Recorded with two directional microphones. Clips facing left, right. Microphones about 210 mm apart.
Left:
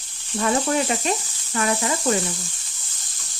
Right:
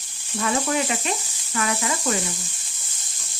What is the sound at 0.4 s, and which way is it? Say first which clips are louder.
Speech: left 2 dB; 35° left (ahead or behind).